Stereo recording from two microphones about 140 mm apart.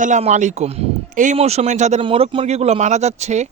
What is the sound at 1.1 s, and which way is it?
Speech, 65° right (ahead or behind).